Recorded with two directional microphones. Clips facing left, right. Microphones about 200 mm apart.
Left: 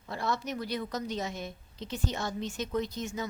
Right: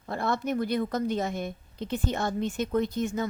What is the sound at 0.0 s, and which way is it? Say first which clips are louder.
A woman's voice: right 4 dB; 55° right (ahead or behind).